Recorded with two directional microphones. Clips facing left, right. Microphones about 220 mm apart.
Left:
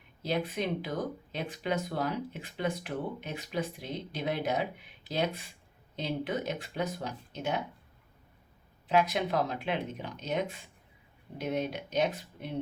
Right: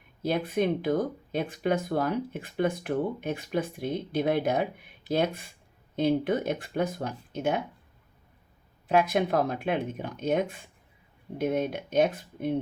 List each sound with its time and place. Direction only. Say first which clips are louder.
0.2 s speech: right 5 dB; 55° right (ahead or behind)
8.9 s speech: right 4 dB; 50° right (ahead or behind)